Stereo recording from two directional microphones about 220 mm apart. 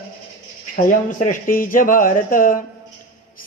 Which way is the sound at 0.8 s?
35° left (ahead or behind).